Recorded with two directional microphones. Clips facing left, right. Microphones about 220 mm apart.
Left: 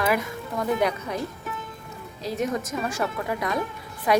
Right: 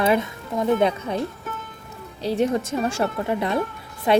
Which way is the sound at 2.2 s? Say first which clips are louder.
Right 5 dB; 30° right (ahead or behind).